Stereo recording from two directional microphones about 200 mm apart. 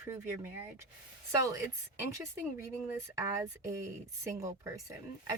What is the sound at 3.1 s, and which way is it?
Speech, 15° right (ahead or behind).